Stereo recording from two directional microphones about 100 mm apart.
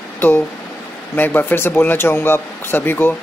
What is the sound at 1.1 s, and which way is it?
Speech, 20° left (ahead or behind).